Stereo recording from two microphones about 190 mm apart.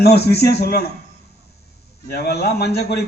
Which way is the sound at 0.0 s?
60° left (ahead or behind).